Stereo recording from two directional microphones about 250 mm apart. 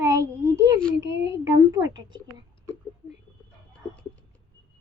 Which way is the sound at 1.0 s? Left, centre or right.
Right.